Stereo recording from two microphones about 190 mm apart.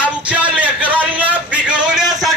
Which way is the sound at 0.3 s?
10° right (ahead or behind).